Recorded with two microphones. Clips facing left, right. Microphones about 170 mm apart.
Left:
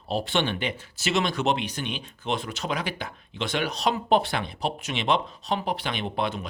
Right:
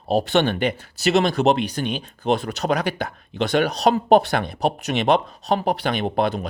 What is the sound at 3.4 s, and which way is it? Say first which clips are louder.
Speech: right 8 dB; 40° right (ahead or behind).